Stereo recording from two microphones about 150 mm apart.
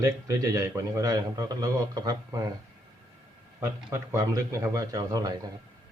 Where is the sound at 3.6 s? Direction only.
15° right (ahead or behind).